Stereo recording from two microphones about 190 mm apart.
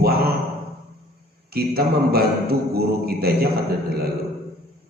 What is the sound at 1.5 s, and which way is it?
A man's voice, 55° right (ahead or behind).